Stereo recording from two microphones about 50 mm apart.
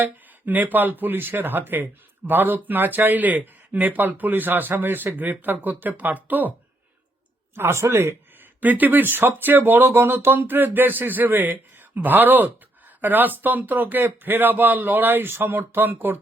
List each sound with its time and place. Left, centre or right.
0.0 s speech: right
7.5 s speech: right
8.6 s speech: right